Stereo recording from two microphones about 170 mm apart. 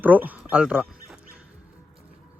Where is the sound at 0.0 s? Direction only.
10° right (ahead or behind).